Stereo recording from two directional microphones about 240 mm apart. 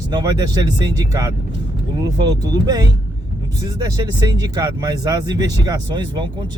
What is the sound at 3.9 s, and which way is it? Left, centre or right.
Speech, centre.